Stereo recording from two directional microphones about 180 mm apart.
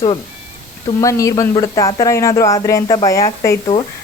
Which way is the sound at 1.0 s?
20° left (ahead or behind).